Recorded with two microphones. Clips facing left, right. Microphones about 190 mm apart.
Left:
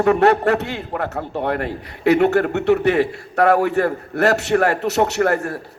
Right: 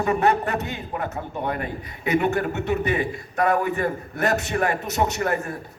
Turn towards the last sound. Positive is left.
turn(degrees=70)  # may be behind; listen again after turning